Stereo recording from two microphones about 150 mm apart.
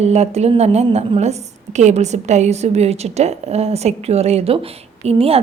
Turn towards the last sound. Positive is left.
turn(degrees=-40)  # may be behind; listen again after turning